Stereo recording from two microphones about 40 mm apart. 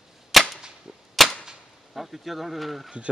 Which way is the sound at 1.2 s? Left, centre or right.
Centre.